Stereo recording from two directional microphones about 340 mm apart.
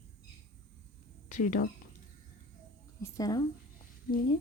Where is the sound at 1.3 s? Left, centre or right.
Left.